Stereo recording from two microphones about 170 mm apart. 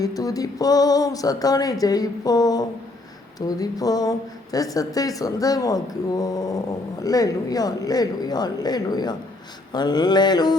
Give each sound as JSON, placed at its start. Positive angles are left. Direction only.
{"t": 0.0, "sound": "a man's voice", "side_deg": 20}